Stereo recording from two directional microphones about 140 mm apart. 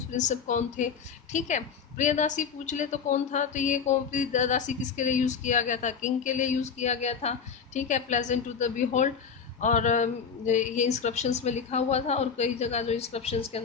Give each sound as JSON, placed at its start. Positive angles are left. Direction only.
{"t": 0.1, "sound": "a woman's voice", "side_deg": 60}